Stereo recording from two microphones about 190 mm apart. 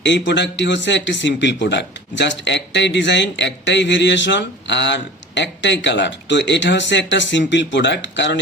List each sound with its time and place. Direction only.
0.0 s a man's voice: 70° left (ahead or behind)